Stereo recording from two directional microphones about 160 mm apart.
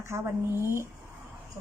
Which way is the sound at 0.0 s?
15° right (ahead or behind).